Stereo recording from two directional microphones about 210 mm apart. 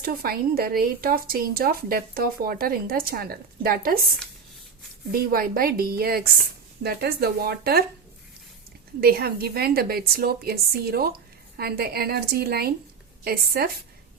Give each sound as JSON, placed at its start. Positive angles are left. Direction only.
{"t": 0.0, "sound": "speech", "side_deg": -45}
{"t": 5.1, "sound": "speech", "side_deg": -45}
{"t": 9.0, "sound": "speech", "side_deg": -45}